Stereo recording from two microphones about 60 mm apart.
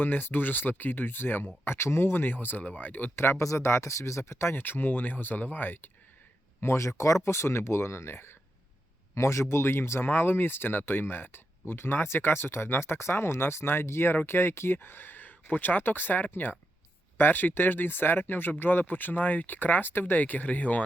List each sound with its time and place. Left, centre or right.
0.0 s speech: left
3.2 s speech: left
4.5 s speech: left
6.6 s speech: left